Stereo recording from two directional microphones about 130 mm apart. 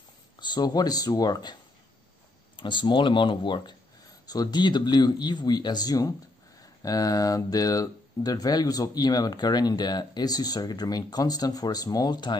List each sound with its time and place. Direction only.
0.4 s speech: 30° left (ahead or behind)